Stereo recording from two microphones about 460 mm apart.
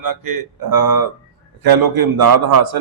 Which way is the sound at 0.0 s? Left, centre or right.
Right.